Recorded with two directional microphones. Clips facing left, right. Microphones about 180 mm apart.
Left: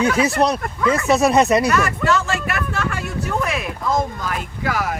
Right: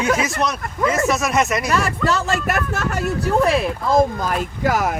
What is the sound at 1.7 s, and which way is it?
Speech, 35° right (ahead or behind).